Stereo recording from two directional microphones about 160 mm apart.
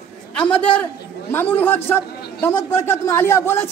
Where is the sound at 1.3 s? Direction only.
10° left (ahead or behind).